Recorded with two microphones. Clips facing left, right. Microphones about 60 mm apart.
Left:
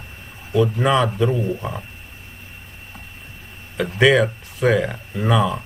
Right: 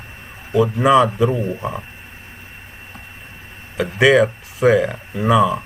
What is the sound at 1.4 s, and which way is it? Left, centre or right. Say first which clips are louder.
Speech: right 1 dB; centre.